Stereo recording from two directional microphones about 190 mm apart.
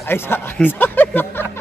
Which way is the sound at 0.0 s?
10° left (ahead or behind).